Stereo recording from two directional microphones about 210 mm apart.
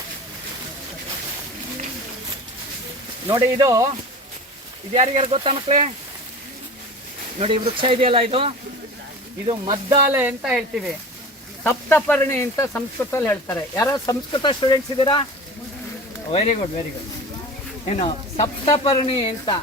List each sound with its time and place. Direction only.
3.2 s speech: 15° right (ahead or behind)
4.9 s speech: 30° right (ahead or behind)
7.3 s speech: 25° right (ahead or behind)
9.6 s speech: 15° right (ahead or behind)
11.6 s speech: 10° left (ahead or behind)
16.3 s speech: 30° left (ahead or behind)
17.8 s speech: 30° left (ahead or behind)